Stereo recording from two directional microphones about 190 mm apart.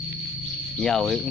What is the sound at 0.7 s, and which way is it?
Speech, centre (ahead or behind).